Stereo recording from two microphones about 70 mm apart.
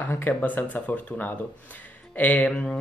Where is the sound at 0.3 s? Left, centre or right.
Left.